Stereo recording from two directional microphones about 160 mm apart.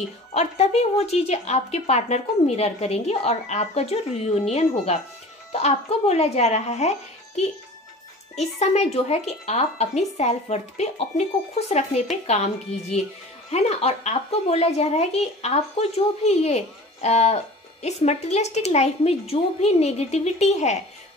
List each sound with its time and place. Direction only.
0.3 s a woman's voice: 45° left (ahead or behind)
13.5 s a woman's voice: 40° left (ahead or behind)